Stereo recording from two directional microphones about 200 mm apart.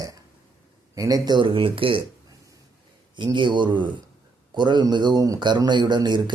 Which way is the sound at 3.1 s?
20° right (ahead or behind).